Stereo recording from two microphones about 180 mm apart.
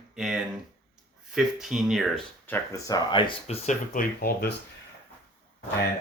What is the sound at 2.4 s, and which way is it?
Speech, 15° left (ahead or behind).